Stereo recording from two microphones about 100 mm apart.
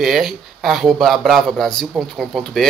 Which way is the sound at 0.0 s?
Centre (ahead or behind).